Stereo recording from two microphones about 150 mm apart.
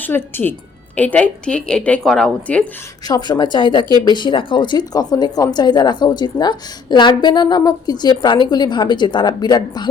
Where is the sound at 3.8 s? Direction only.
30° right (ahead or behind).